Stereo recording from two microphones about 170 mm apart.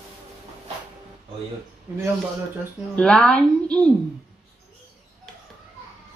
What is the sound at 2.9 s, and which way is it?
A woman's voice, 5° left (ahead or behind).